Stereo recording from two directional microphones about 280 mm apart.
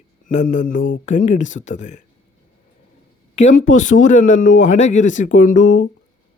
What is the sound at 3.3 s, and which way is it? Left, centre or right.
Speech, left.